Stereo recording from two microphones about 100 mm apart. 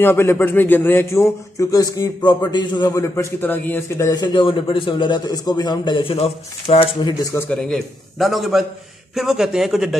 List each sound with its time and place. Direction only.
0.0 s a man's voice: 25° left (ahead or behind); by 2.9 s 50° left (ahead or behind)
2.9 s a man's voice: 30° left (ahead or behind)
3.3 s a man's voice: 20° left (ahead or behind)
4.1 s a man's voice: 50° left (ahead or behind); by 7.0 s 70° left (ahead or behind)
7.5 s a man's voice: 5° left (ahead or behind)